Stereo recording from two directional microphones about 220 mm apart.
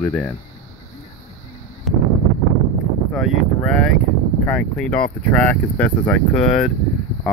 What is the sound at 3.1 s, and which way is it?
Speech, centre (ahead or behind).